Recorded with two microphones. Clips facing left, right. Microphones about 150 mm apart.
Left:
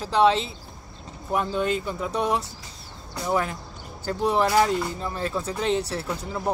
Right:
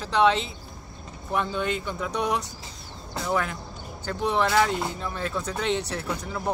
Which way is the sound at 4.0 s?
35° left (ahead or behind).